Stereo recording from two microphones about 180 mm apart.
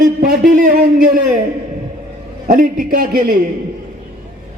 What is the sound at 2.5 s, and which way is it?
Speech, 50° right (ahead or behind).